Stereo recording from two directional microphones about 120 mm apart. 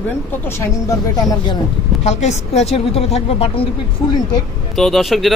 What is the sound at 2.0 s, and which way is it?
A woman's voice, 70° left (ahead or behind).